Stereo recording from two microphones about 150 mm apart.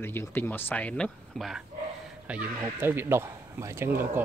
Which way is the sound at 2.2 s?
10° right (ahead or behind).